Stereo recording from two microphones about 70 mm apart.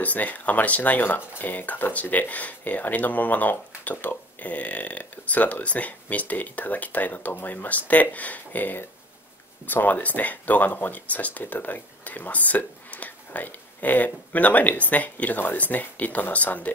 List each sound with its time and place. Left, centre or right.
0.0 s speech: left